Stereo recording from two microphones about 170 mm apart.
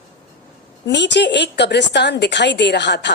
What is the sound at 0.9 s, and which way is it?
A woman's voice, 90° left.